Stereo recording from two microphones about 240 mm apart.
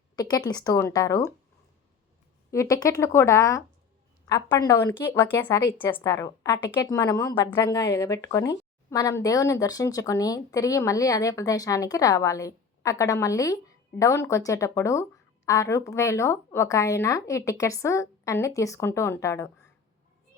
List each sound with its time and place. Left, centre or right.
0.2 s a woman's voice: centre
2.5 s a woman's voice: centre